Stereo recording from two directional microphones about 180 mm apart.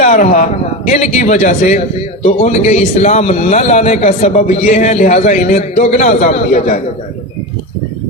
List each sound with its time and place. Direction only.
0.0 s a man's voice: 45° left (ahead or behind)